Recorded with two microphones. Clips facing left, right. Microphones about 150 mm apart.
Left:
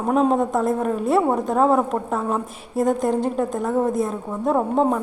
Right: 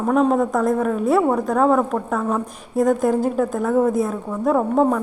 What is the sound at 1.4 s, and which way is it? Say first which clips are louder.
A woman's voice: right 1 dB; centre (ahead or behind).